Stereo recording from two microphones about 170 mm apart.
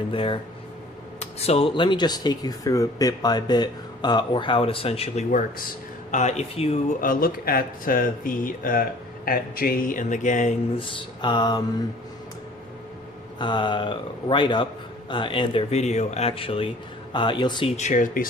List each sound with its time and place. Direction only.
0.1 s speech: 30° left (ahead or behind)
7.0 s speech: 55° left (ahead or behind)
10.8 s speech: 30° left (ahead or behind)
13.4 s speech: 25° left (ahead or behind)
17.7 s speech: 45° left (ahead or behind)